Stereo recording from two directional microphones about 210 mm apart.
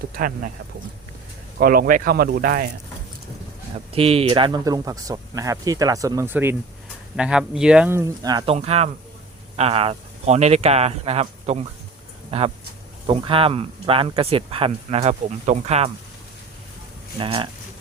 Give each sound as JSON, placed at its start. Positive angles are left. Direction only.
{"t": 0.1, "sound": "speech", "side_deg": -40}
{"t": 1.5, "sound": "speech", "side_deg": -45}
{"t": 3.9, "sound": "speech", "side_deg": -30}
{"t": 8.5, "sound": "speech", "side_deg": -30}
{"t": 17.2, "sound": "speech", "side_deg": -25}